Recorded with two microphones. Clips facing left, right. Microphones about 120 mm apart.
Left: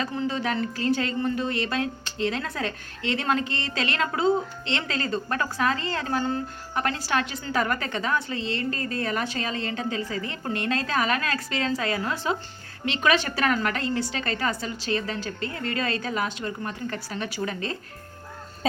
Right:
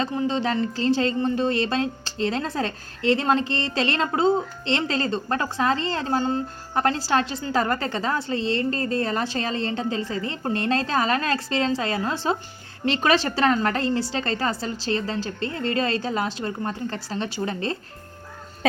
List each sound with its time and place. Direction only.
0.0 s a woman's voice: 25° right (ahead or behind)
18.6 s speech: 80° right